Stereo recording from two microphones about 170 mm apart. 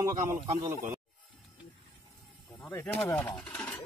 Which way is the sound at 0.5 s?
15° right (ahead or behind).